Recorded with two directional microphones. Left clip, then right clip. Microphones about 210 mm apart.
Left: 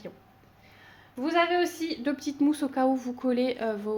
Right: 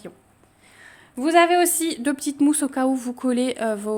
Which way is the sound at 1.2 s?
55° right (ahead or behind).